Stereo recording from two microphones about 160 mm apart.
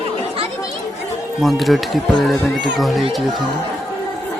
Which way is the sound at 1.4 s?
Centre (ahead or behind).